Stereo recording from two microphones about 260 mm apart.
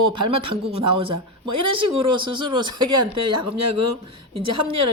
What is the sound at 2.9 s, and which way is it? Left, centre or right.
A woman's voice, right.